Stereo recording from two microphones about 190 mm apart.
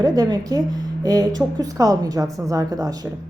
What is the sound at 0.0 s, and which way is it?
A woman's voice, 20° right (ahead or behind).